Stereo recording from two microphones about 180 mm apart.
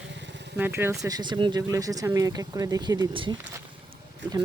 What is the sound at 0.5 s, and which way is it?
Speech, 10° right (ahead or behind).